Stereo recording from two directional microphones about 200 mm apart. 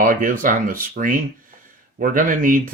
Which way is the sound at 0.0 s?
45° right (ahead or behind).